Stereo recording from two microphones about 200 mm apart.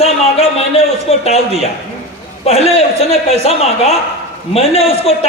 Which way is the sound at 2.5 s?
30° left (ahead or behind).